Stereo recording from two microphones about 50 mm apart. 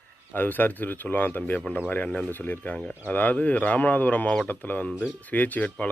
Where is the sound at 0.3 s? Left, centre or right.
Left.